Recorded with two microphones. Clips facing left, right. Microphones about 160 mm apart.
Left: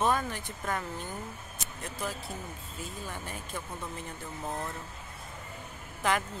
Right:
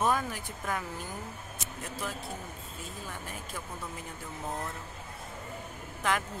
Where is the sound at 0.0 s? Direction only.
5° right (ahead or behind).